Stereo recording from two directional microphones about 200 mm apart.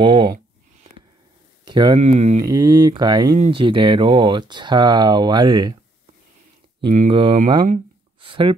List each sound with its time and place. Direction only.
0.0 s a sound: 25° right (ahead or behind)
1.6 s a sound: 20° right (ahead or behind)
2.0 s speech: 35° right (ahead or behind)
2.5 s speech: 20° right (ahead or behind)
6.9 s speech: 40° right (ahead or behind)
7.2 s speech: 25° right (ahead or behind)